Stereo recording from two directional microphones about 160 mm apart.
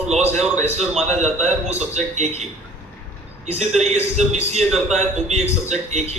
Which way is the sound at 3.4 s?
40° right (ahead or behind).